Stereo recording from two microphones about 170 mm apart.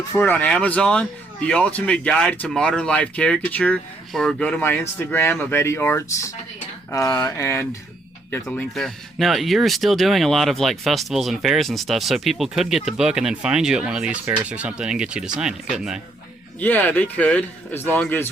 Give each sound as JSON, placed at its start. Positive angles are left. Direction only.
{"t": 0.1, "sound": "speech", "side_deg": 10}
{"t": 8.4, "sound": "speech", "side_deg": 5}
{"t": 16.6, "sound": "speech", "side_deg": 10}